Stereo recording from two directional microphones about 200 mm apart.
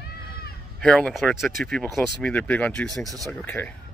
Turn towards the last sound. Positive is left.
turn(degrees=10)  # may be behind; listen again after turning